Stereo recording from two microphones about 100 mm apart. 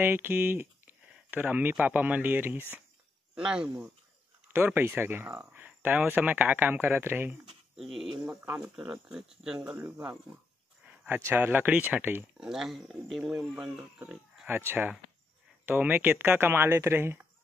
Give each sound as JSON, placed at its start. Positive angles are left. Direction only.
{"t": 0.0, "sound": "speech", "side_deg": -20}
{"t": 3.3, "sound": "speech", "side_deg": -10}
{"t": 7.7, "sound": "speech", "side_deg": 0}
{"t": 8.6, "sound": "speech", "side_deg": -15}
{"t": 9.8, "sound": "speech", "side_deg": -25}
{"t": 12.4, "sound": "speech", "side_deg": -5}
{"t": 14.0, "sound": "a sound", "side_deg": -5}
{"t": 14.7, "sound": "speech", "side_deg": -15}